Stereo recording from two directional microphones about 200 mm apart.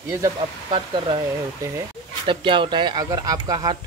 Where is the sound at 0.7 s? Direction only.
25° right (ahead or behind).